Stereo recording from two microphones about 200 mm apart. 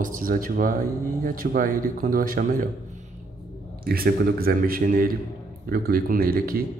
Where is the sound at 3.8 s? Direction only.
50° right (ahead or behind).